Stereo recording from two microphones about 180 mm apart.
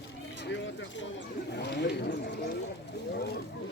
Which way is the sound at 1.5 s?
65° left (ahead or behind).